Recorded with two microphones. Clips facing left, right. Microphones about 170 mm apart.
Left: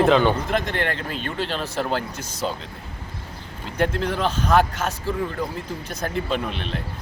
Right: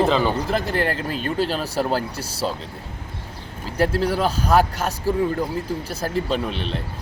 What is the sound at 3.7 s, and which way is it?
Speech, 5° right (ahead or behind).